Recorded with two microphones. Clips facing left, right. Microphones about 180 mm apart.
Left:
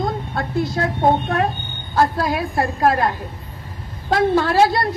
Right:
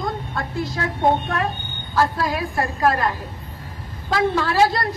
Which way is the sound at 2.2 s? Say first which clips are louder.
Left 3 dB; 55° left (ahead or behind).